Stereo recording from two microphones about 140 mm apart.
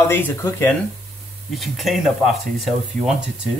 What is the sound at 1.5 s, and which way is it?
Speech, centre (ahead or behind).